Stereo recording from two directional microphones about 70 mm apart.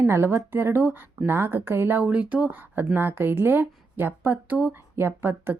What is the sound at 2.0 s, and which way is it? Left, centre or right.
Speech, right.